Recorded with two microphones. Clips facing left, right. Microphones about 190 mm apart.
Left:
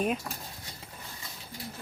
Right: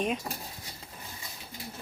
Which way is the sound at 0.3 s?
15° right (ahead or behind).